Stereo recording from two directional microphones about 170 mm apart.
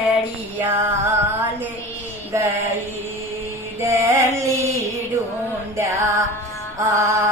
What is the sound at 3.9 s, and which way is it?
Music, 20° right (ahead or behind).